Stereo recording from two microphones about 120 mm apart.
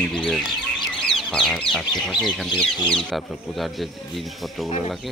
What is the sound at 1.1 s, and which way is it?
Speech, centre (ahead or behind).